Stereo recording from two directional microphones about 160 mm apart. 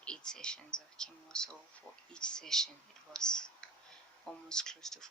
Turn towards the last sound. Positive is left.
turn(degrees=5)  # may be behind; listen again after turning